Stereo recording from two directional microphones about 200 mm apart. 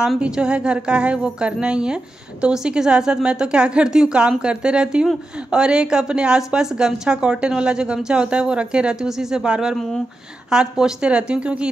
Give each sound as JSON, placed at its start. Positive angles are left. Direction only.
{"t": 0.0, "sound": "a woman's voice", "side_deg": -5}